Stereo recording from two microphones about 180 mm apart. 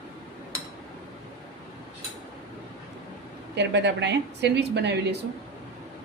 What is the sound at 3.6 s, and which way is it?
A woman's voice, 75° right (ahead or behind).